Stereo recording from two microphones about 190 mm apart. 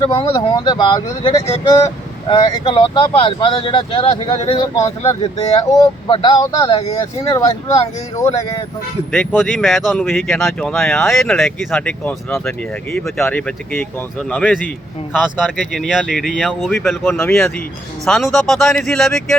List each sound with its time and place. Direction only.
0.0 s speech: 30° left (ahead or behind)
6.7 s speech: 30° left (ahead or behind)
7.3 s speech: 20° left (ahead or behind)
9.1 s speech: centre (ahead or behind)
17.0 s speech: 10° left (ahead or behind)